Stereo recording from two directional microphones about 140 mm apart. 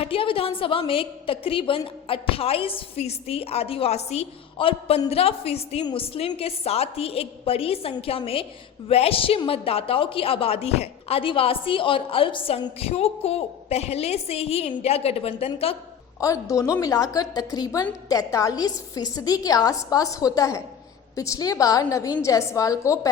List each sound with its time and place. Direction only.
0.0 s a woman's voice: 40° left (ahead or behind)
16.2 s a woman's voice: 25° left (ahead or behind)